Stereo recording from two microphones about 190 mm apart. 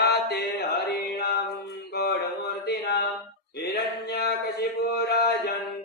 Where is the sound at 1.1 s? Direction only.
55° left (ahead or behind).